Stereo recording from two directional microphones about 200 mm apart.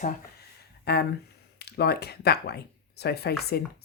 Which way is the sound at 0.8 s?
55° left (ahead or behind).